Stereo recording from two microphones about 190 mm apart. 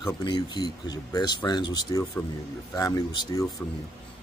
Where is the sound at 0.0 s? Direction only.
25° left (ahead or behind).